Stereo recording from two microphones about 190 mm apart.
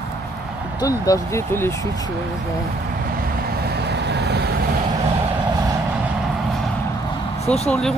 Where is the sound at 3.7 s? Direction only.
60° right (ahead or behind).